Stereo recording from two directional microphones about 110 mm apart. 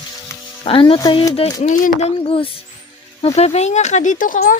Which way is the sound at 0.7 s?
55° left (ahead or behind).